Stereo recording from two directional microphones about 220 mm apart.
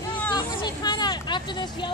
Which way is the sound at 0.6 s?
20° left (ahead or behind).